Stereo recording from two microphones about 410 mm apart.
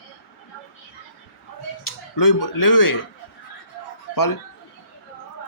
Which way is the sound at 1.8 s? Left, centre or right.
Left.